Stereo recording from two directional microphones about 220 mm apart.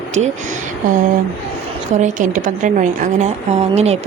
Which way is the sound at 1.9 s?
35° right (ahead or behind).